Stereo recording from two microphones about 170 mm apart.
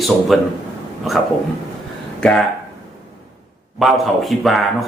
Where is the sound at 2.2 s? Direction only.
5° left (ahead or behind).